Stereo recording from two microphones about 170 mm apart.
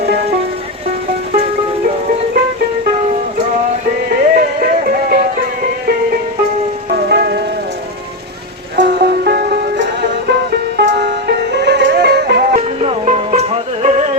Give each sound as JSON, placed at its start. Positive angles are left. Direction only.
{"t": 4.4, "sound": "music", "side_deg": -60}
{"t": 6.9, "sound": "music", "side_deg": -65}
{"t": 8.7, "sound": "music", "side_deg": -70}
{"t": 10.8, "sound": "music", "side_deg": -75}
{"t": 12.5, "sound": "music", "side_deg": -40}